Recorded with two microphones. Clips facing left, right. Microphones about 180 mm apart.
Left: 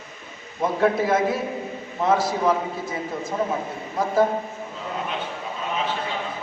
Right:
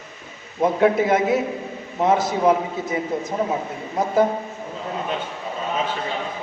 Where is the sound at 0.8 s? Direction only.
20° right (ahead or behind).